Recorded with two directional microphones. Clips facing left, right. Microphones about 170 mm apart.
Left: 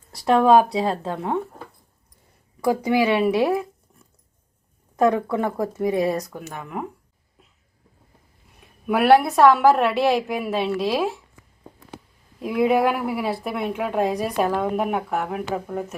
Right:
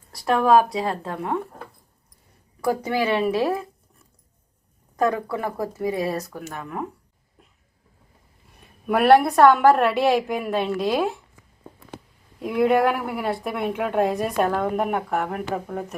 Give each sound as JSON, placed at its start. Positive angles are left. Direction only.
{"t": 0.1, "sound": "speech", "side_deg": 25}
{"t": 2.6, "sound": "speech", "side_deg": 15}
{"t": 4.9, "sound": "speech", "side_deg": 25}
{"t": 8.9, "sound": "a woman's voice", "side_deg": 0}
{"t": 12.4, "sound": "a woman's voice", "side_deg": 0}